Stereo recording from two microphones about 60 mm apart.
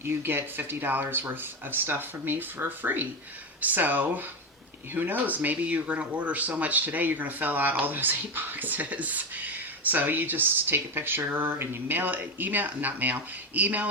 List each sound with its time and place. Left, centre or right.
0.0 s speech: right